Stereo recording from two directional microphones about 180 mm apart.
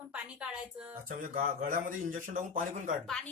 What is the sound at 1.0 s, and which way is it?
Speech, 50° right (ahead or behind).